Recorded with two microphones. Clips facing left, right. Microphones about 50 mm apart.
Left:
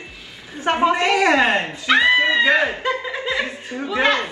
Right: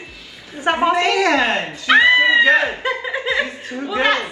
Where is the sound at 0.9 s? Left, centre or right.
Left.